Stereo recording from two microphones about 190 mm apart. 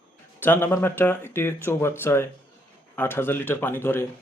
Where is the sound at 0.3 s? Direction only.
10° left (ahead or behind).